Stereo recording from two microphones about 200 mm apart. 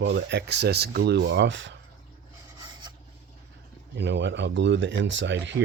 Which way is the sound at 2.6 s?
20° right (ahead or behind).